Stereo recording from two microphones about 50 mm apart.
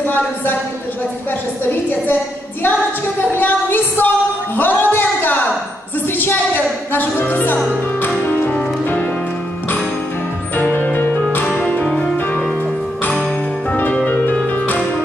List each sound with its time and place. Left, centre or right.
0.0 s a woman's voice: left
1.6 s a woman's voice: left
2.6 s a sound: left
4.6 s music: left
4.9 s a sound: left
6.0 s music: left
10.7 s music: left
11.9 s music: centre
14.0 s harp: left